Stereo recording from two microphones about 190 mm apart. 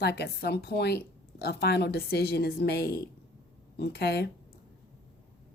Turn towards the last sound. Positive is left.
turn(degrees=55)  # may be behind; listen again after turning